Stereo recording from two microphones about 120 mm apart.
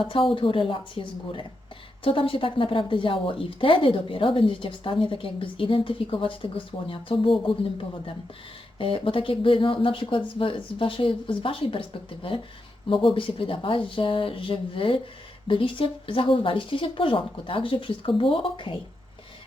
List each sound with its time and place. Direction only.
0.3 s speech: 45° left (ahead or behind)
8.8 s speech: 50° left (ahead or behind)